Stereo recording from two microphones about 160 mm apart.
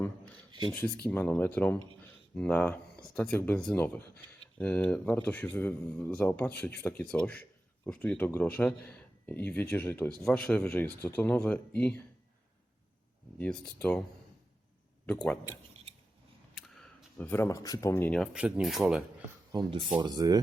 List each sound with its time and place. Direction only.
0.7 s speech: 15° left (ahead or behind)
13.7 s speech: 5° left (ahead or behind)
15.0 s speech: 10° left (ahead or behind)
16.6 s a sound: centre (ahead or behind)
17.2 s speech: 15° left (ahead or behind)
18.3 s speech: 5° right (ahead or behind)
20.0 s speech: 25° right (ahead or behind)